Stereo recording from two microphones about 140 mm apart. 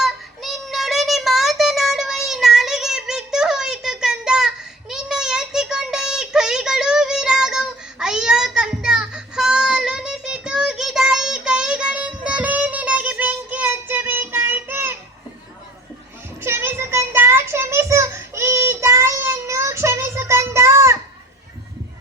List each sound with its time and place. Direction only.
0.0 s child singing: centre (ahead or behind)
16.4 s child singing: 20° right (ahead or behind)